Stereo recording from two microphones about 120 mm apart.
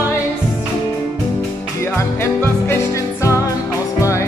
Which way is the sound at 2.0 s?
20° left (ahead or behind).